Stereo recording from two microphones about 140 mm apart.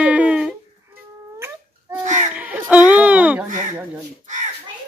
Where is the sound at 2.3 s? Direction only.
10° right (ahead or behind).